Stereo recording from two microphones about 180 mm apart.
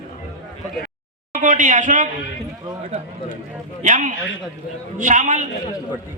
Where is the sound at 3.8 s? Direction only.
45° right (ahead or behind).